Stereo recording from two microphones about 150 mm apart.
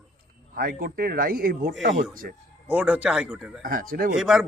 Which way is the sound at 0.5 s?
85° right.